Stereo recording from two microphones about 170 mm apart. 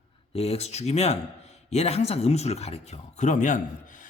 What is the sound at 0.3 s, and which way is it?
Speech, 35° left (ahead or behind).